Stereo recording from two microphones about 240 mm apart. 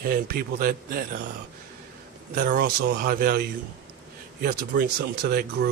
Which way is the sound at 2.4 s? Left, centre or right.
Right.